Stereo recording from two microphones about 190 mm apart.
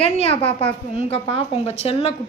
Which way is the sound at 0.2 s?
30° left (ahead or behind).